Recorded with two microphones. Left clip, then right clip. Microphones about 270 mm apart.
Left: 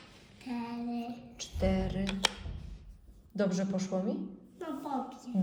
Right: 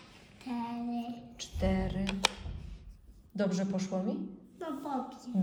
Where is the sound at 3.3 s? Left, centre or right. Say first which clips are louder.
Left 1 dB; centre.